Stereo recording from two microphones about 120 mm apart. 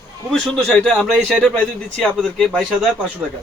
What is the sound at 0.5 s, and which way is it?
Speech, 10° left (ahead or behind).